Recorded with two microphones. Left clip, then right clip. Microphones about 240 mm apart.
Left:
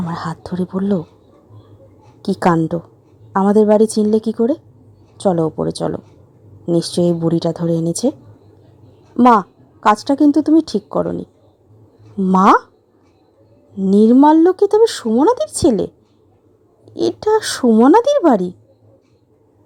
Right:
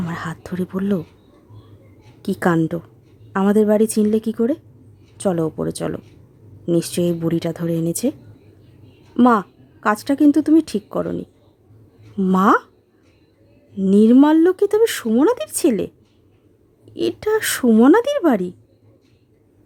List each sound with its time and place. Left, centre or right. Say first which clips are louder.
0.0 s speech: left 4 dB; centre
2.2 s speech: left 4 dB; centre
9.1 s speech: left 5 dB; centre
13.8 s speech: left 3 dB; centre
16.9 s speech: left 4 dB; centre